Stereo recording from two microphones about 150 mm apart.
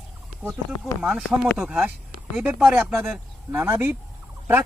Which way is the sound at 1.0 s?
5° right (ahead or behind).